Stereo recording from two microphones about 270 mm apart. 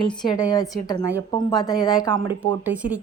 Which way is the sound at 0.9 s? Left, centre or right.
Centre.